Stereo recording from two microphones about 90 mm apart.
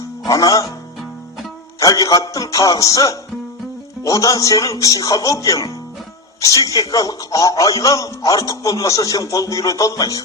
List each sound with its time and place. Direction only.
0.3 s speech: 40° left (ahead or behind)
1.8 s speech: 40° left (ahead or behind)